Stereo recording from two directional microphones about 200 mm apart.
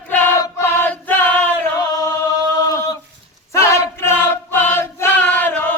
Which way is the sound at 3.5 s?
15° left (ahead or behind).